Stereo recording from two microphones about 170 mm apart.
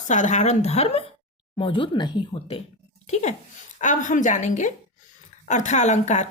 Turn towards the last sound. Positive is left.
turn(degrees=45)  # may be behind; listen again after turning